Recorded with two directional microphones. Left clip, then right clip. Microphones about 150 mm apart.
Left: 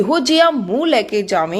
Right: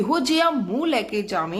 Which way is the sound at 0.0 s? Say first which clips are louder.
Left 7 dB; 25° left (ahead or behind).